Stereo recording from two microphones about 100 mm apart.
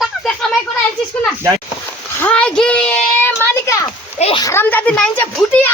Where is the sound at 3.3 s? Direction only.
25° left (ahead or behind).